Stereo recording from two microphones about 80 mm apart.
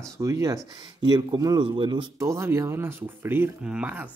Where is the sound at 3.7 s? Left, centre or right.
Centre.